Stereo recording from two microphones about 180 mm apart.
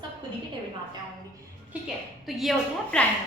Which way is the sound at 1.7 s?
5° right (ahead or behind).